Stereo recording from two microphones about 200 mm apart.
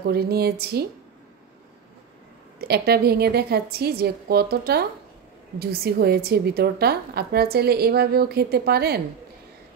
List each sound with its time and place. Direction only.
0.1 s a woman's voice: 50° right (ahead or behind)
2.7 s a woman's voice: 50° right (ahead or behind)